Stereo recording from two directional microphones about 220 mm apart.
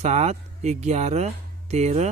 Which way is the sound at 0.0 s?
30° right (ahead or behind).